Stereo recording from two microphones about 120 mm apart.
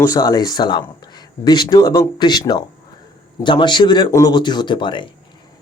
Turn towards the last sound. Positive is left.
turn(degrees=40)  # may be behind; listen again after turning